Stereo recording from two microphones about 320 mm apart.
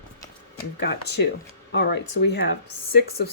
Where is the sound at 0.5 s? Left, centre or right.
Left.